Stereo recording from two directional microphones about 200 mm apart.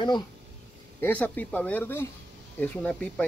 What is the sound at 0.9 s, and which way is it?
Speech, 10° left (ahead or behind).